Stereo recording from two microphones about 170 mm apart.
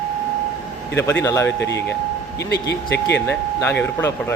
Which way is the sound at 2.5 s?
85° left.